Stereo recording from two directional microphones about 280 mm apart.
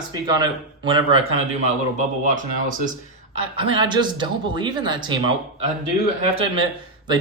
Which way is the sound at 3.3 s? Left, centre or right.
Centre.